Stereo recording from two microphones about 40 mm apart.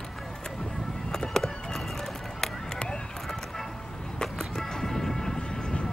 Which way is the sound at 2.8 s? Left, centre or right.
Left.